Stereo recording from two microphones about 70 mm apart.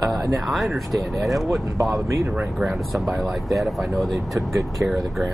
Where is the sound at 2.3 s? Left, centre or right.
Centre.